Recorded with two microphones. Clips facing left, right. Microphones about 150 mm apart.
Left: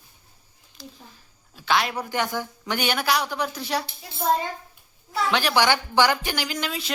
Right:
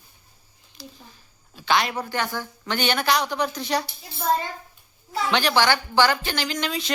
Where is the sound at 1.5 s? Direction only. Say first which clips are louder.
Right 1 dB; centre (ahead or behind).